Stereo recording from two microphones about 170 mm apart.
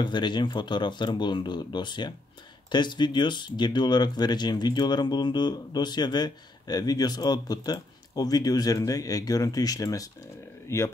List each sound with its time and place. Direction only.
0.0 s speech: 25° left (ahead or behind)